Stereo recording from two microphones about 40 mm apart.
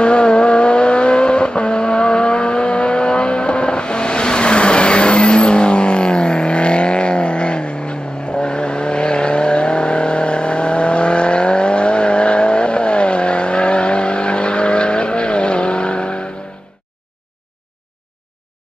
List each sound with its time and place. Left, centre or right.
0.0 s vehicle: left